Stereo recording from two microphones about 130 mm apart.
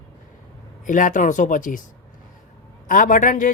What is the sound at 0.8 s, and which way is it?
Speech, 90° left.